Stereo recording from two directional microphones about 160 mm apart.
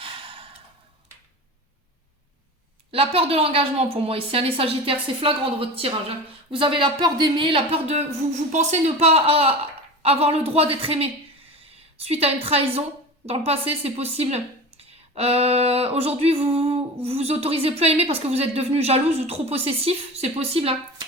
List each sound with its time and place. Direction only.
0.0 s sigh: 35° right (ahead or behind)
2.9 s a woman's voice: 35° right (ahead or behind)